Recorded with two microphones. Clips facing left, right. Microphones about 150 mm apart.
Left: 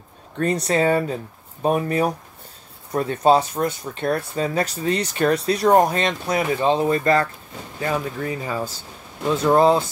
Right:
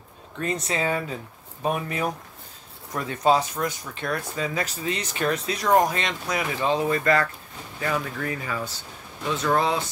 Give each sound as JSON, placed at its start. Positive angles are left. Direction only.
{"t": 0.9, "sound": "speech", "side_deg": 40}